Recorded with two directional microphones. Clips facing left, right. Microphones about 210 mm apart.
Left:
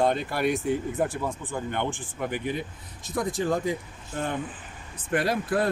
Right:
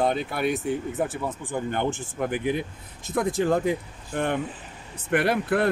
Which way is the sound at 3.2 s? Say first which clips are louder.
Right 4 dB; 55° right (ahead or behind).